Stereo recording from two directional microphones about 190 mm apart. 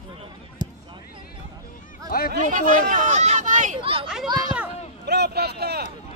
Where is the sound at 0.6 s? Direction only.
25° right (ahead or behind).